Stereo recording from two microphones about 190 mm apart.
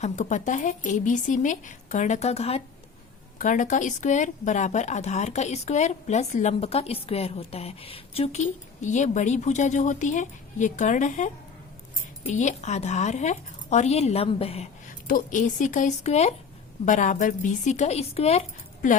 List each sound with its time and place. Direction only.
0.0 s a woman's voice: 40° left (ahead or behind)
15.0 s a woman's voice: 45° left (ahead or behind)